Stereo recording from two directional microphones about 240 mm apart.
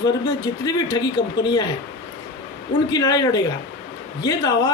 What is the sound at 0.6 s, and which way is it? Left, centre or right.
Speech, centre.